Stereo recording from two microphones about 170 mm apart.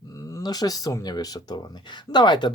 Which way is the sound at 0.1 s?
20° left (ahead or behind).